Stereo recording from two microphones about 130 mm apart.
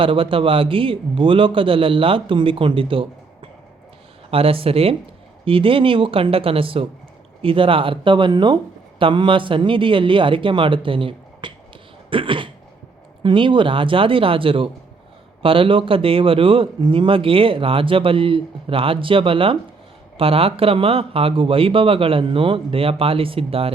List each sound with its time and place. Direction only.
0.0 s a man's voice: 40° right (ahead or behind)